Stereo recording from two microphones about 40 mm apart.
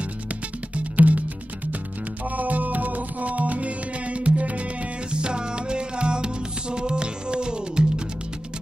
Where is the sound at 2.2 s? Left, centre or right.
Right.